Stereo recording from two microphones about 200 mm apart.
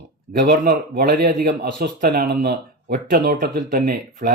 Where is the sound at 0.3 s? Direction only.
50° right (ahead or behind).